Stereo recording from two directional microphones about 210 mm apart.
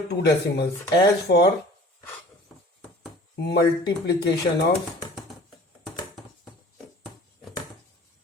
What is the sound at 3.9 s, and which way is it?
Speech, 50° left (ahead or behind).